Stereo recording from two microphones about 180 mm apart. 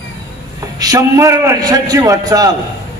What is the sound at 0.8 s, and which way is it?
A man's voice, 20° right (ahead or behind).